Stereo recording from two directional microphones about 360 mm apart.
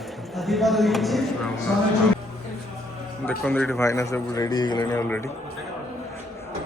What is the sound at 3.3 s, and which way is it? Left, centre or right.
A man's voice, centre.